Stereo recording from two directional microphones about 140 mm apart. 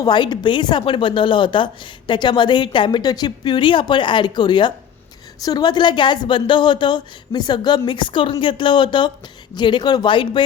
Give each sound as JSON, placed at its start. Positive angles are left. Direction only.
{"t": 0.0, "sound": "speech", "side_deg": 30}